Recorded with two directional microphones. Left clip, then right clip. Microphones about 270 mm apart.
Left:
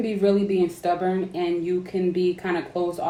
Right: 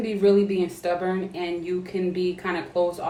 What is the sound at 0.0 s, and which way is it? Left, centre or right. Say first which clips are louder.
Speech: right 2 dB; centre.